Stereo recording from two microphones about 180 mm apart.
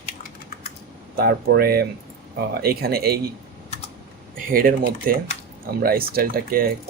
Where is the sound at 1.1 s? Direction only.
60° right (ahead or behind).